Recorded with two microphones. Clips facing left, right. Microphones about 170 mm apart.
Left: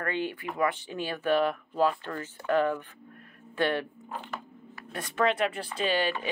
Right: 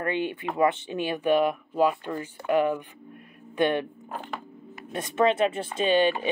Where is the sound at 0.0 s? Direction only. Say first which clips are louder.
Right 4 dB; 20° right (ahead or behind).